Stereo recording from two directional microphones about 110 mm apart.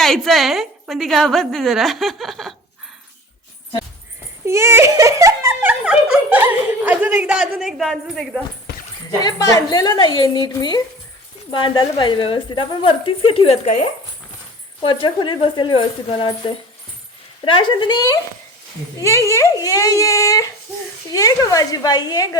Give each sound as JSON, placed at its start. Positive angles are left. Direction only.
{"t": 0.0, "sound": "a woman's voice", "side_deg": 0}
{"t": 4.4, "sound": "speech", "side_deg": -25}
{"t": 5.6, "sound": "speech", "side_deg": -10}
{"t": 9.2, "sound": "a woman's voice", "side_deg": 35}
{"t": 14.8, "sound": "a woman's voice", "side_deg": 50}